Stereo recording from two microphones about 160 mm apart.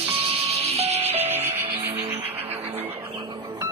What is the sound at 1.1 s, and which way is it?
Music, 15° right (ahead or behind).